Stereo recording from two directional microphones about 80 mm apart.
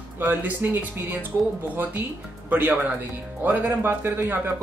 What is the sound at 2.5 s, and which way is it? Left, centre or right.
Speech, right.